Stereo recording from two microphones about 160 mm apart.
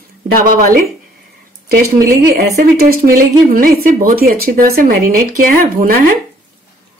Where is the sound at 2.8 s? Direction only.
70° right (ahead or behind).